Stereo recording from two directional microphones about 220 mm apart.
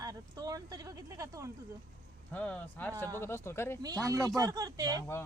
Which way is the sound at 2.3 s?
5° left (ahead or behind).